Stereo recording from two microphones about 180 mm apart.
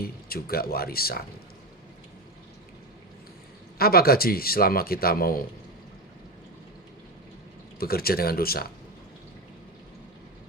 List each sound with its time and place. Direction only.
0.0 s a man's voice: 55° left (ahead or behind)
3.8 s a man's voice: 60° left (ahead or behind)
7.8 s a man's voice: 55° left (ahead or behind)